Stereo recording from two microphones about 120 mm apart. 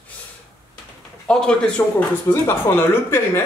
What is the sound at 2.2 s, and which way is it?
Speech, 20° left (ahead or behind).